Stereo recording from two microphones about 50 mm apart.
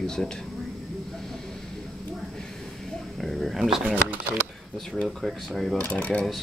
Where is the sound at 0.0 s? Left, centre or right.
Centre.